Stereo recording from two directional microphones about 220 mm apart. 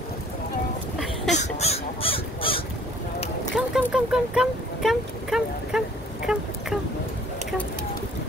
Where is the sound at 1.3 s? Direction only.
30° left (ahead or behind).